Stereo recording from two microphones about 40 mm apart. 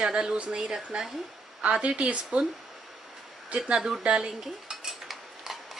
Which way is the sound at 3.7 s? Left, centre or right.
Centre.